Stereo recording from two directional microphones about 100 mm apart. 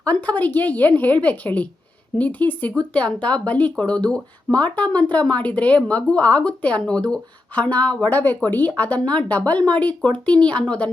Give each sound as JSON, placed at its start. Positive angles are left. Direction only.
{"t": 0.0, "sound": "speech", "side_deg": 15}